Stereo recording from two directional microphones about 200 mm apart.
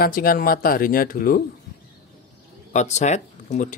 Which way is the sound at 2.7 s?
35° left (ahead or behind).